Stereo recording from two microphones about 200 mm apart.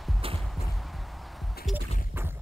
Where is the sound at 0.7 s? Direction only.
Centre (ahead or behind).